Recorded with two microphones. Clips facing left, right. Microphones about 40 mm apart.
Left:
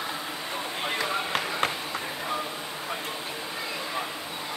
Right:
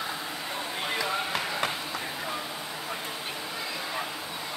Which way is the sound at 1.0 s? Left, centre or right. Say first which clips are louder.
Left 2 dB; left.